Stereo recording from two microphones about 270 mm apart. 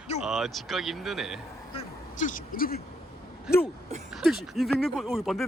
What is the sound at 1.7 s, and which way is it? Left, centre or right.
Speech, left.